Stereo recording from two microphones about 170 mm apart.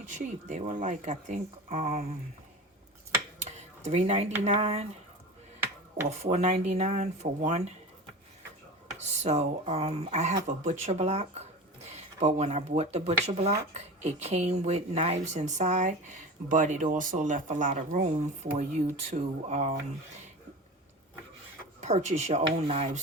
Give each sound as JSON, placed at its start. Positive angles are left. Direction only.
{"t": 0.0, "sound": "speech", "side_deg": -45}
{"t": 3.4, "sound": "dishes", "side_deg": -40}
{"t": 4.4, "sound": "speech", "side_deg": -40}
{"t": 6.1, "sound": "speech", "side_deg": -40}
{"t": 9.0, "sound": "speech", "side_deg": -40}
{"t": 19.1, "sound": "speech", "side_deg": -40}
{"t": 21.8, "sound": "speech", "side_deg": -45}